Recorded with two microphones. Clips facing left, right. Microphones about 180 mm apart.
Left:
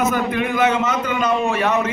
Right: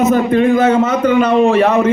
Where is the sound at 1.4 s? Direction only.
60° right (ahead or behind).